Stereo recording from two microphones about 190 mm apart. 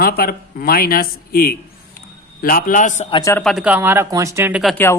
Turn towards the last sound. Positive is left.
turn(degrees=10)  # may be behind; listen again after turning